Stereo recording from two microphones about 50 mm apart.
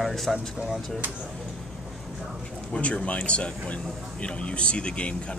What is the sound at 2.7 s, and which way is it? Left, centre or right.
Speech, left.